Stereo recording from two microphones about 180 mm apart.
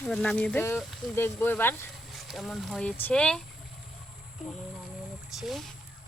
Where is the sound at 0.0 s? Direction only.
5° left (ahead or behind).